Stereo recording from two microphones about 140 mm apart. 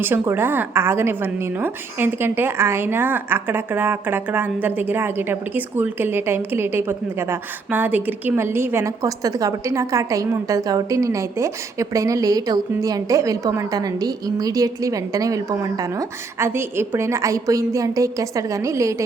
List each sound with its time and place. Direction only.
0.0 s a woman's voice: 15° right (ahead or behind)